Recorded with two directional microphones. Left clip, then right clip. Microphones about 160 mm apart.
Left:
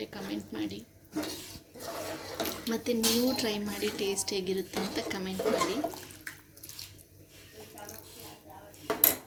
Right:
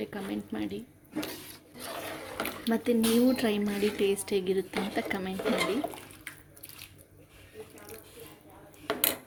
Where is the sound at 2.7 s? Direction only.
30° right (ahead or behind).